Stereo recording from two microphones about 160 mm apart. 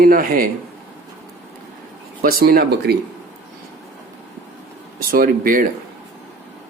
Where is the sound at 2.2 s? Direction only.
65° right (ahead or behind).